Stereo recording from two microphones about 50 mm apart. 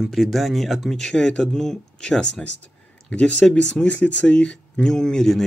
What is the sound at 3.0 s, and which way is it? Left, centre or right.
Speech, left.